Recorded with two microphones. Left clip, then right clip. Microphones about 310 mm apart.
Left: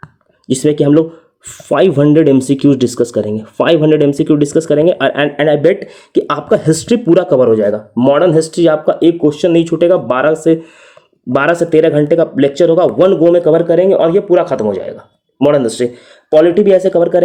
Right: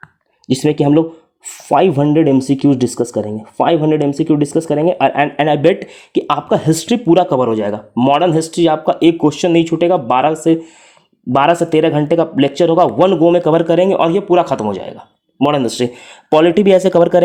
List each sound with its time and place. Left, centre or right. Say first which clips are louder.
0.4 s speech: left 2 dB; centre